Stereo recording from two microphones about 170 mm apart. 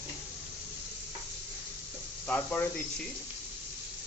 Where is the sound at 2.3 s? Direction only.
10° left (ahead or behind).